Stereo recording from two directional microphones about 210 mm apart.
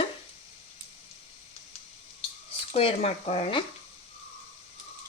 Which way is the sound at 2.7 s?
30° left (ahead or behind).